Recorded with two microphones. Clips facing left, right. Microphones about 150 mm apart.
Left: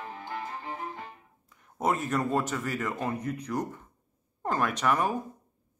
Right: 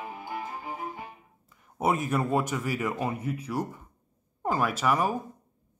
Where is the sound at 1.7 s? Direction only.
10° right (ahead or behind).